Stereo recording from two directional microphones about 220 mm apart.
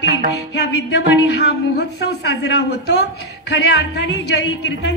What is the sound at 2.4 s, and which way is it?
A woman's voice, 55° left (ahead or behind).